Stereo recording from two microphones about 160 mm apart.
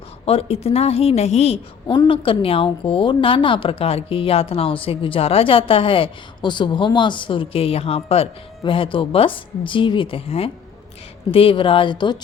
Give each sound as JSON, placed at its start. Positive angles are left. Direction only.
{"t": 0.3, "sound": "a woman's voice", "side_deg": 35}
{"t": 1.9, "sound": "a woman's voice", "side_deg": 30}